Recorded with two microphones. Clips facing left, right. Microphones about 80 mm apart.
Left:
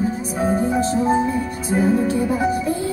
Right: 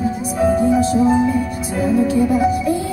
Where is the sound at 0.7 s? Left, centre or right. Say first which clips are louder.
Right 4 dB; left.